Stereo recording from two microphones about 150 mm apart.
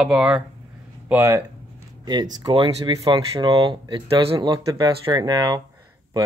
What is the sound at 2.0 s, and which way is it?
Speech, 30° right (ahead or behind).